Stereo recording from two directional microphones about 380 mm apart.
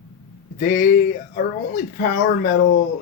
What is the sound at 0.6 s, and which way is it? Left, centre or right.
Speech, left.